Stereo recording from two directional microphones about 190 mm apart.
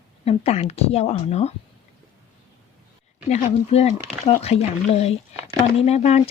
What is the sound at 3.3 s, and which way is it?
Speech, 35° left (ahead or behind).